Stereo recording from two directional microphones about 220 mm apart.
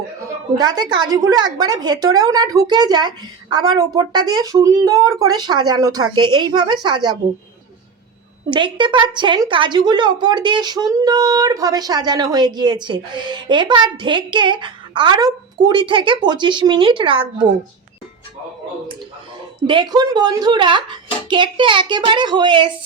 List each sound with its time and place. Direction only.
0.5 s a woman's voice: 20° right (ahead or behind)
8.4 s a woman's voice: 20° right (ahead or behind)
19.6 s a woman's voice: 20° right (ahead or behind)